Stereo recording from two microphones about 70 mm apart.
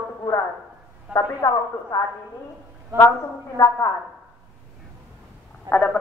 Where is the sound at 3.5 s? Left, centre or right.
Left.